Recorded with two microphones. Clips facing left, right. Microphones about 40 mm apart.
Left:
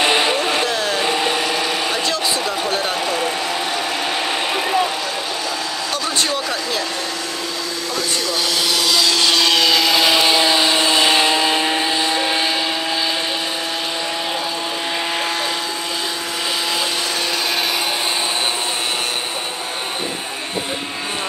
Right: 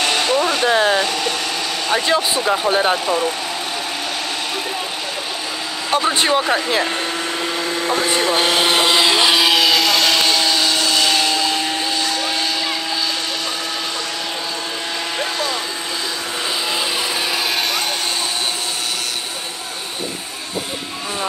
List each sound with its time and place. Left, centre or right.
0.0 s a sound: left
0.7 s a sound: right
1.0 s blender: centre
2.0 s speech: right
5.9 s speech: right
7.9 s vehicle: right; by 12.4 s left